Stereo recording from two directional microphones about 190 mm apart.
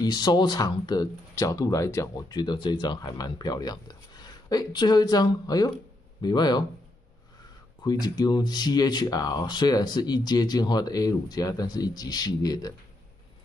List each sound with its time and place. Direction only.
0.0 s speech: 20° left (ahead or behind)
7.8 s speech: 20° left (ahead or behind)